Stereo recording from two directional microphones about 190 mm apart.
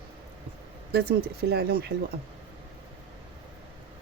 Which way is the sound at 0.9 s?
55° right (ahead or behind).